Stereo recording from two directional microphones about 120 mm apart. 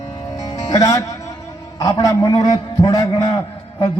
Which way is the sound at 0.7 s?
30° left (ahead or behind).